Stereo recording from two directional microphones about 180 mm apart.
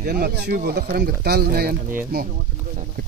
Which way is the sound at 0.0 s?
65° right (ahead or behind).